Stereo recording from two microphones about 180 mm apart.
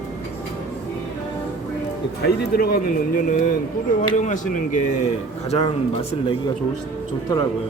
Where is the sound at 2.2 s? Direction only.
60° left (ahead or behind).